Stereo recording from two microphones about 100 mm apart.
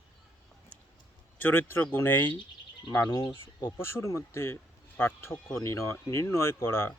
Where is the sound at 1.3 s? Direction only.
20° left (ahead or behind).